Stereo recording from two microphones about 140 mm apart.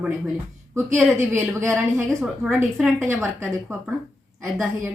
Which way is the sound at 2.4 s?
5° right (ahead or behind).